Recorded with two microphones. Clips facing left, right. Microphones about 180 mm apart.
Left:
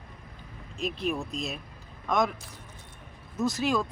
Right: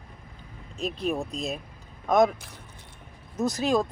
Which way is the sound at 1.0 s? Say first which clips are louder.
Right 3 dB; 35° right (ahead or behind).